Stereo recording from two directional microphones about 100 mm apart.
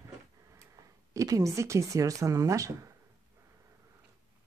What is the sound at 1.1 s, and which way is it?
Speech, 35° right (ahead or behind).